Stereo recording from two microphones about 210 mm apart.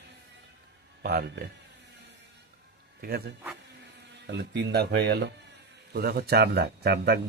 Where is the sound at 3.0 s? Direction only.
45° right (ahead or behind).